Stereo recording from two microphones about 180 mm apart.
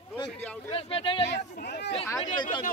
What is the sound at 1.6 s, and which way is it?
Speech, 65° left (ahead or behind).